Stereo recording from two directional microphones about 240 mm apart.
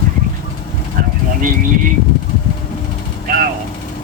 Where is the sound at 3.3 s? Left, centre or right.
Right.